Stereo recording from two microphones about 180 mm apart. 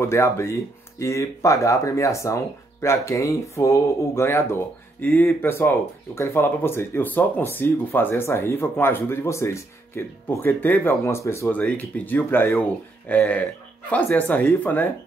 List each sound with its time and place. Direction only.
0.0 s speech: 15° left (ahead or behind)